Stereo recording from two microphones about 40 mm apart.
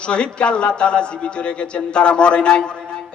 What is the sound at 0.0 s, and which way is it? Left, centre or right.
Speech, left.